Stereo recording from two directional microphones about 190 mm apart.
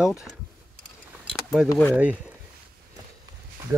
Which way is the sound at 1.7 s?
10° left (ahead or behind).